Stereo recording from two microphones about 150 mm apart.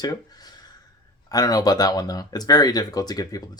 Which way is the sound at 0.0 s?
25° left (ahead or behind).